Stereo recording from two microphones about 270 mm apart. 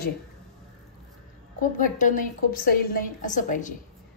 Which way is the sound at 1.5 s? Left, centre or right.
Left.